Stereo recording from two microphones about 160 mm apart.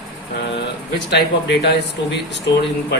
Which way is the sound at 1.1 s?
90° left.